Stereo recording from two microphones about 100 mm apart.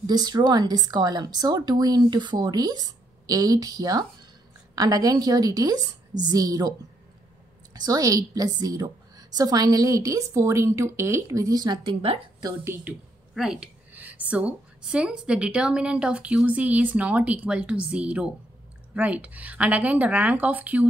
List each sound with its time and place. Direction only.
0.0 s speech: 40° right (ahead or behind)
7.7 s speech: 40° right (ahead or behind)
11.8 s a woman's voice: 65° right (ahead or behind)
12.6 s a woman's voice: 20° right (ahead or behind)
13.3 s a woman's voice: 5° right (ahead or behind)
13.9 s a woman's voice: 15° right (ahead or behind)